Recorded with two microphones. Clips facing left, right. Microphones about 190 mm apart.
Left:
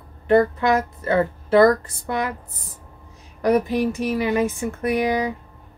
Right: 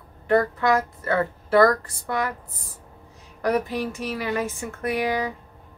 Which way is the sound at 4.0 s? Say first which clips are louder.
Left 6 dB; 20° left (ahead or behind).